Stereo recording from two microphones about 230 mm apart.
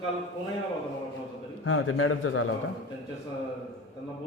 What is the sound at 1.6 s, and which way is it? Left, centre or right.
Speech, left.